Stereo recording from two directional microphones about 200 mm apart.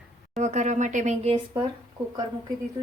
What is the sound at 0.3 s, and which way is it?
Speech, 35° right (ahead or behind).